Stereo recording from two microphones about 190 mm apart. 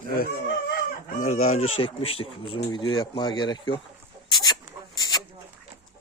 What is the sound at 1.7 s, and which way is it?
Speech, 30° left (ahead or behind).